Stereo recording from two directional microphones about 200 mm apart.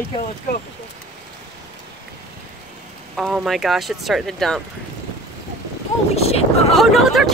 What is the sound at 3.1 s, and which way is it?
Speech, centre (ahead or behind).